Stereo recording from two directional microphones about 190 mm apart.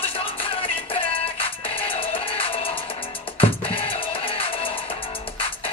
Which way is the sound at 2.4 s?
30° left (ahead or behind).